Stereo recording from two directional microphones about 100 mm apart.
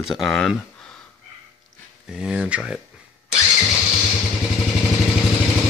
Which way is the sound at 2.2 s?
10° right (ahead or behind).